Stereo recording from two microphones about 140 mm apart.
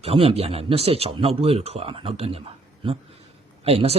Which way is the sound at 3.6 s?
45° right (ahead or behind).